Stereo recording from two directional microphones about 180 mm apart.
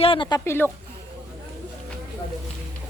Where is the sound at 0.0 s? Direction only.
30° left (ahead or behind); by 0.7 s 15° left (ahead or behind).